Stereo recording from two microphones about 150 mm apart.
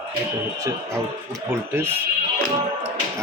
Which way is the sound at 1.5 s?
15° right (ahead or behind).